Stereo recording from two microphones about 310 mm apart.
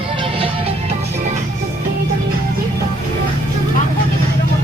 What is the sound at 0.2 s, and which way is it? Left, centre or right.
Music, centre.